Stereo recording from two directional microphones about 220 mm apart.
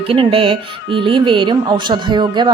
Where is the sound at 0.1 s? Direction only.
25° right (ahead or behind).